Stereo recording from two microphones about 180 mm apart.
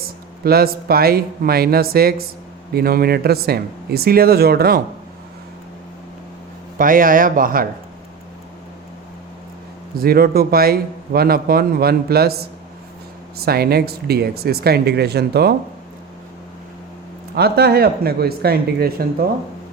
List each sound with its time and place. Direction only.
0.4 s a man's voice: 60° right (ahead or behind)
6.7 s speech: 50° right (ahead or behind)
10.0 s a man's voice: 55° right (ahead or behind)
17.3 s a man's voice: 65° right (ahead or behind)